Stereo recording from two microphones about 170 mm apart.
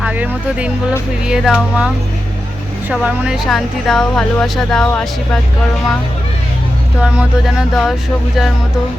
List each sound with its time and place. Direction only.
0.0 s speech: 10° right (ahead or behind)
2.9 s speech: 5° right (ahead or behind)
7.0 s speech: 5° right (ahead or behind)